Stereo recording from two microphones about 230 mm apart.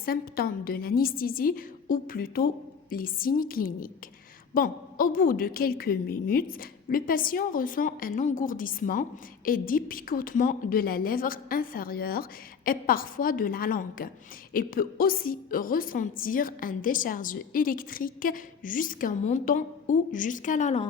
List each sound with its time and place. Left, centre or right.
0.0 s a woman's voice: left